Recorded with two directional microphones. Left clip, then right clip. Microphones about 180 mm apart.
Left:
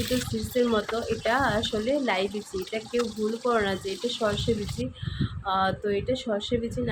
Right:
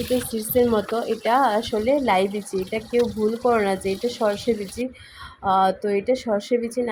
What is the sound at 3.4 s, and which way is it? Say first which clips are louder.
A woman's voice: right 5 dB; 20° right (ahead or behind).